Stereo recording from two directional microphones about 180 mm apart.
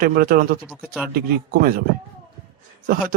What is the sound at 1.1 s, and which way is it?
Speech, 55° right (ahead or behind).